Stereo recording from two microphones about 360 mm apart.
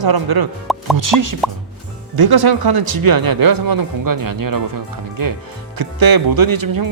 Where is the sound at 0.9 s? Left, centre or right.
Right.